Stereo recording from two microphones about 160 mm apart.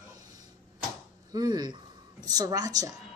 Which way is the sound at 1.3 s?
25° right (ahead or behind).